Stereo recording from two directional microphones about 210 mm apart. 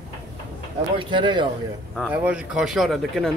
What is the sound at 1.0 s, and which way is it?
Speech, 20° right (ahead or behind).